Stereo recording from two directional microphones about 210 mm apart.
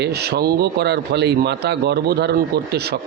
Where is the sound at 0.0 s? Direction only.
50° right (ahead or behind).